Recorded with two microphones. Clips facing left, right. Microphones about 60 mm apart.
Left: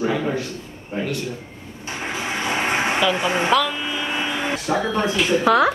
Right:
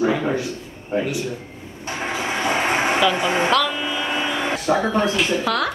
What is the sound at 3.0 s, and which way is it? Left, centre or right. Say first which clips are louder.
Speech: right 1 dB; centre.